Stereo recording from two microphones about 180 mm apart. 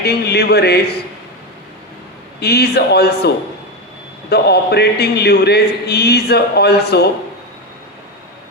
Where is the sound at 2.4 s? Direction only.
65° left (ahead or behind).